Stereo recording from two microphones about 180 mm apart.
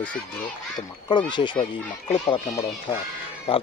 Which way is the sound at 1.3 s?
25° left (ahead or behind).